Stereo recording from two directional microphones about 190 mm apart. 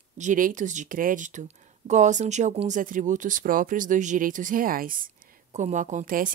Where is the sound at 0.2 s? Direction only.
45° right (ahead or behind).